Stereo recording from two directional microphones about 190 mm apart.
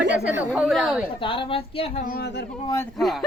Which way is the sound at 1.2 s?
25° left (ahead or behind).